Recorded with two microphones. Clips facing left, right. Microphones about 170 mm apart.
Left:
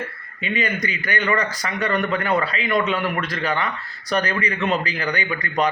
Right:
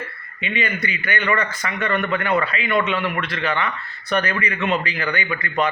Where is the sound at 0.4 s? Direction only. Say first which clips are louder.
Left 1 dB; 40° left (ahead or behind).